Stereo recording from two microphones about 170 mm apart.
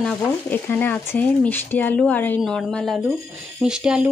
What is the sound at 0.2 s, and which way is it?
A woman's voice, 15° left (ahead or behind).